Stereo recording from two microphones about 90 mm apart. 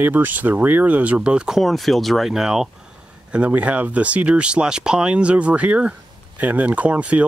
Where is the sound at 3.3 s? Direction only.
15° right (ahead or behind).